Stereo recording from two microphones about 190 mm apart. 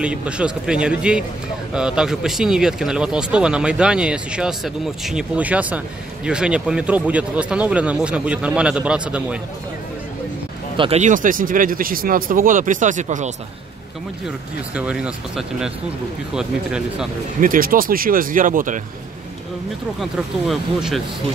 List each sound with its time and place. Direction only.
0.0 s speech: 5° right (ahead or behind)
10.8 s speech: 35° right (ahead or behind)
14.8 s speech: 5° right (ahead or behind)
17.4 s speech: 45° right (ahead or behind)
20.0 s speech: centre (ahead or behind)